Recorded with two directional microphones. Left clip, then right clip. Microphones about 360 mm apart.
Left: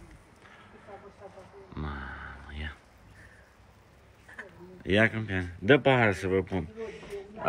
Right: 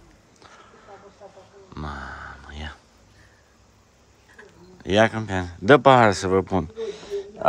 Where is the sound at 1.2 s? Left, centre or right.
Right.